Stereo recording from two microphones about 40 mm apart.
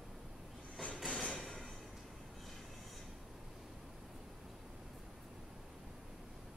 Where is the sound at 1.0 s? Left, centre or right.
Left.